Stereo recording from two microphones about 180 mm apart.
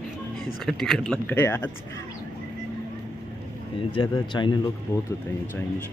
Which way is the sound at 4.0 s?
25° left (ahead or behind).